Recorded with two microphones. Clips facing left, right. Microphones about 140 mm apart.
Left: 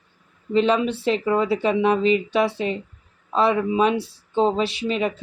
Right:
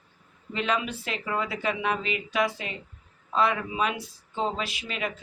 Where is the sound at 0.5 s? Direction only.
30° left (ahead or behind).